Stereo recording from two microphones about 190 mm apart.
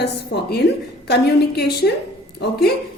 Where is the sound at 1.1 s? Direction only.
55° left (ahead or behind).